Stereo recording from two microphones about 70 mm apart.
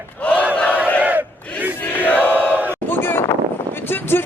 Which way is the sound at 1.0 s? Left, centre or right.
Right.